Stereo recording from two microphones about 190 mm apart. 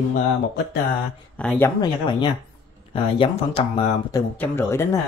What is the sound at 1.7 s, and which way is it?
Speech, 25° left (ahead or behind).